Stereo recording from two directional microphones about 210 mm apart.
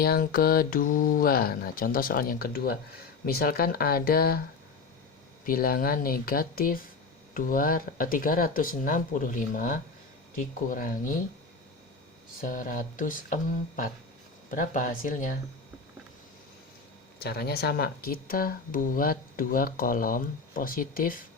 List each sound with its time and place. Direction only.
0.0 s speech: 45° left (ahead or behind)
5.5 s speech: 45° left (ahead or behind)
12.4 s speech: 40° left (ahead or behind)
17.2 s speech: 50° left (ahead or behind)